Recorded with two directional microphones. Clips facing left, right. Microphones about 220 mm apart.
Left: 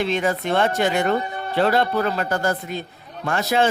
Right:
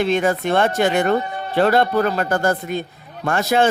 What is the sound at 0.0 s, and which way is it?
Speech, 50° right (ahead or behind).